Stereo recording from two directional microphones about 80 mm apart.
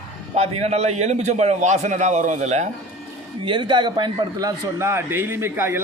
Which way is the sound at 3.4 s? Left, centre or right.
Right.